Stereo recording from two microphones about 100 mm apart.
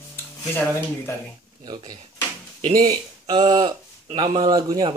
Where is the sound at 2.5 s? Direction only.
90° right.